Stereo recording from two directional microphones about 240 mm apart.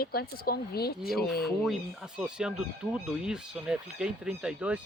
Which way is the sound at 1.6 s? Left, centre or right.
Centre.